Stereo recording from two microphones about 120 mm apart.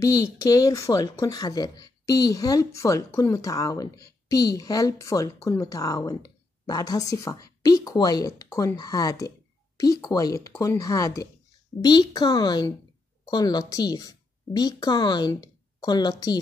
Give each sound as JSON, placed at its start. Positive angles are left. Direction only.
{"t": 0.0, "sound": "a woman's voice", "side_deg": 30}